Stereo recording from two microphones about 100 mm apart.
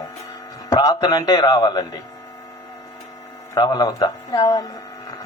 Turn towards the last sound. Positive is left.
turn(degrees=40)  # may be behind; listen again after turning